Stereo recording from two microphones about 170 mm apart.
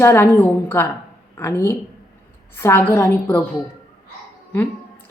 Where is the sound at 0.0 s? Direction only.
15° left (ahead or behind).